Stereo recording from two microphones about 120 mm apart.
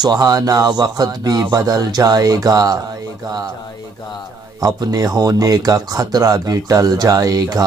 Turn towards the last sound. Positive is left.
turn(degrees=-30)  # may be behind; listen again after turning